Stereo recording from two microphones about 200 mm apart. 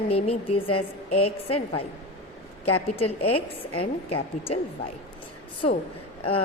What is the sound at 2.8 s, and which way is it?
A woman's voice, 30° left (ahead or behind).